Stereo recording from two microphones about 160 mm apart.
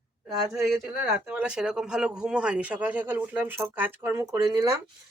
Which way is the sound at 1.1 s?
5° right (ahead or behind).